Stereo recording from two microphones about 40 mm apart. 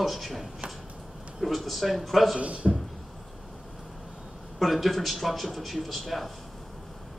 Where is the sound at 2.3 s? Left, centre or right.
Right.